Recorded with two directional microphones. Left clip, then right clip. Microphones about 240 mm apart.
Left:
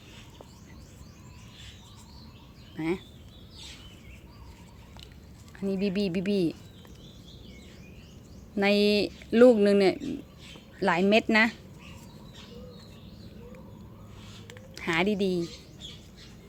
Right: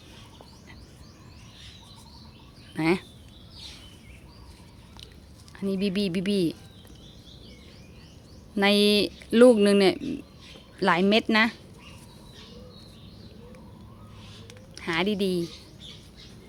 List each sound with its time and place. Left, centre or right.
2.7 s speech: right
5.5 s speech: centre
8.5 s speech: centre
14.8 s speech: centre